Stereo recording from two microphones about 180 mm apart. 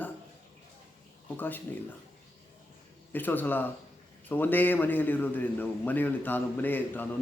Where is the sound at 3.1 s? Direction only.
10° left (ahead or behind).